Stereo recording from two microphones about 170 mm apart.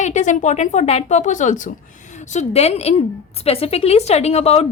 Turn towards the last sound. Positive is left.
turn(degrees=40)  # may be behind; listen again after turning